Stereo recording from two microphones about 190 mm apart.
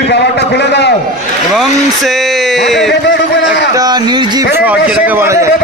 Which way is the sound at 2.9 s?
65° left (ahead or behind).